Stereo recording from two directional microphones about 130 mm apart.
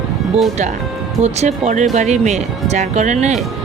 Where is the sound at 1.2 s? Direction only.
60° right (ahead or behind).